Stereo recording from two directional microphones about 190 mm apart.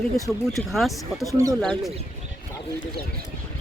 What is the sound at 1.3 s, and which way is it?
Speech, 15° right (ahead or behind).